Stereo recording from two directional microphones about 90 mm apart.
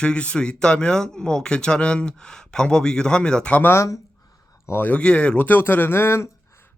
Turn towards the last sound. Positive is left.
turn(degrees=30)  # may be behind; listen again after turning